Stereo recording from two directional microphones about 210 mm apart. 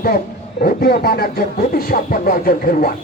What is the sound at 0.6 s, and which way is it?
Speech, 45° left (ahead or behind).